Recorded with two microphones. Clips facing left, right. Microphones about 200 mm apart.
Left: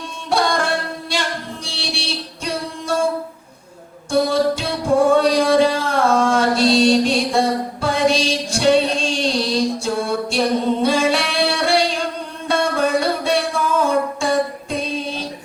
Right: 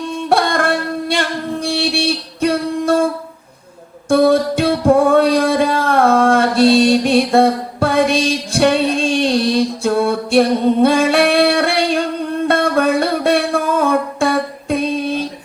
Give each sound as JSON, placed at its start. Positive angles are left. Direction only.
{"t": 0.3, "sound": "music", "side_deg": -55}
{"t": 4.1, "sound": "music", "side_deg": -55}